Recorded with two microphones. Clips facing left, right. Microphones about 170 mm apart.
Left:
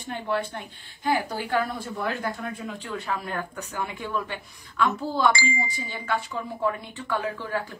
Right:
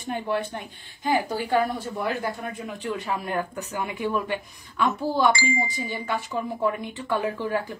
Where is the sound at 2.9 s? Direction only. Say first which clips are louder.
Right 1 dB; 15° right (ahead or behind).